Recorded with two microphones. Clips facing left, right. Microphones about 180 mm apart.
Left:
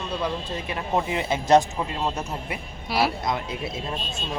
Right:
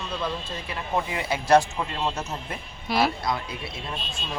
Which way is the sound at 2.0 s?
5° left (ahead or behind).